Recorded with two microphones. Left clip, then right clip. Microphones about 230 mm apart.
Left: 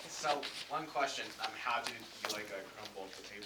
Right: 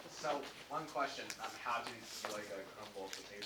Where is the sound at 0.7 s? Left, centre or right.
Left.